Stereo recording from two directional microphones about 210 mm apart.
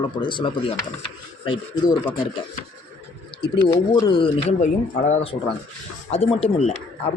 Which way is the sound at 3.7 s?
20° left (ahead or behind).